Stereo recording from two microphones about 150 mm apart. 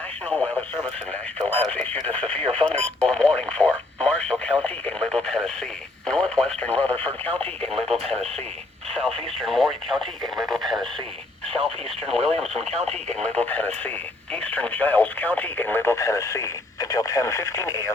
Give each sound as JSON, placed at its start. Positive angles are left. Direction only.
{"t": 1.4, "sound": "radio", "side_deg": 10}